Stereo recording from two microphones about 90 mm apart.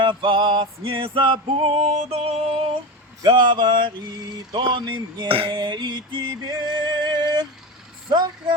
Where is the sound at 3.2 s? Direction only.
55° right (ahead or behind).